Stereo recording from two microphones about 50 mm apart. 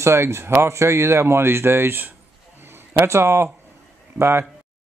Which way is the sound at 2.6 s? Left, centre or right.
Right.